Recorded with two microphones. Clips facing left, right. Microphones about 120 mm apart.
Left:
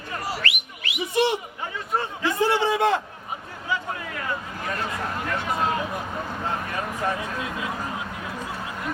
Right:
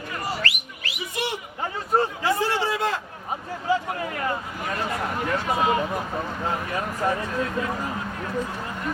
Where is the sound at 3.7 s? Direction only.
40° right (ahead or behind).